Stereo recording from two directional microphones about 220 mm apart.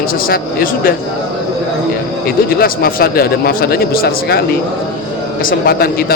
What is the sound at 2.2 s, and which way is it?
A man's voice, 45° left (ahead or behind).